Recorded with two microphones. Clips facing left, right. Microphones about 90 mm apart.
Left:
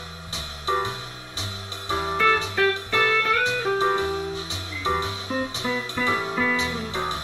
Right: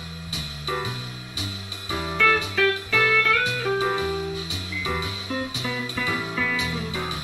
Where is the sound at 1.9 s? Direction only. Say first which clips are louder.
Left 1 dB; 30° left (ahead or behind).